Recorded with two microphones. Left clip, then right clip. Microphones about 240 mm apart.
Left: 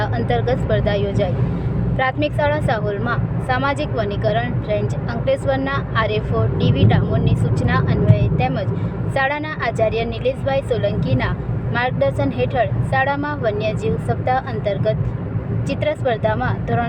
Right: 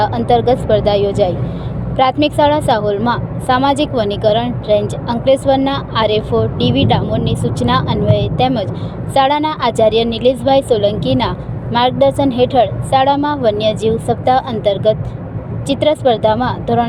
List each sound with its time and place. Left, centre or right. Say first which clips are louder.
0.0 s a woman's voice: right 8 dB; centre